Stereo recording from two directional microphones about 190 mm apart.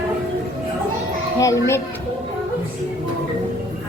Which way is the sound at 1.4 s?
15° left (ahead or behind).